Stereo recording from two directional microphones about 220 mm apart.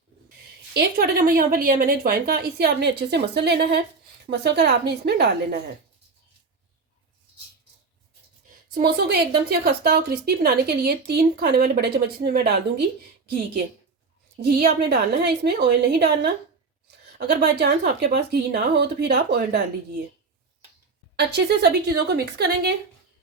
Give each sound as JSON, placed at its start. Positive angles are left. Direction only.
{"t": 0.7, "sound": "speech", "side_deg": -45}
{"t": 8.7, "sound": "speech", "side_deg": -45}
{"t": 14.8, "sound": "speech", "side_deg": -45}
{"t": 21.2, "sound": "speech", "side_deg": -50}